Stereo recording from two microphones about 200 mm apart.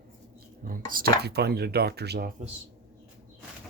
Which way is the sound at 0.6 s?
45° right (ahead or behind).